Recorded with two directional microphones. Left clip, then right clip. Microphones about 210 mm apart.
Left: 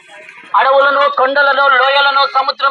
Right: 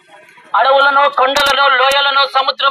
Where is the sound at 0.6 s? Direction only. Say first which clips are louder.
Even; 25° right (ahead or behind).